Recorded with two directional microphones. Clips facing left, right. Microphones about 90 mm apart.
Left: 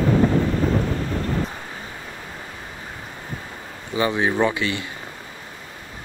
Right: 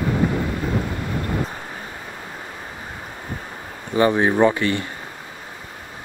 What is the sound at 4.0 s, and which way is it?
Speech, 50° right (ahead or behind).